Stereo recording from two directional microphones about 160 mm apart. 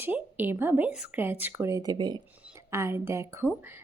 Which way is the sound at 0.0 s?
10° right (ahead or behind).